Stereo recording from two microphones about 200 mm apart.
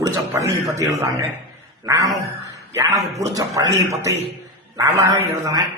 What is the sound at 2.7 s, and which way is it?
Speech, 15° right (ahead or behind).